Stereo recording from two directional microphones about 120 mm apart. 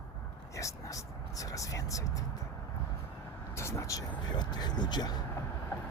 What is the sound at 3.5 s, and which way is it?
Vehicle, 25° left (ahead or behind).